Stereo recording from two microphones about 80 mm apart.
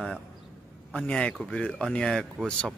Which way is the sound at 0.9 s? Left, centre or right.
Centre.